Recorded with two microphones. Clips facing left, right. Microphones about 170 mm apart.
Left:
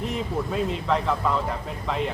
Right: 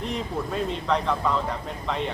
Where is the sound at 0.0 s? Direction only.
5° left (ahead or behind).